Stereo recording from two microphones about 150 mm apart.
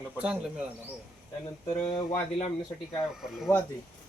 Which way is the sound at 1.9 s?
30° left (ahead or behind).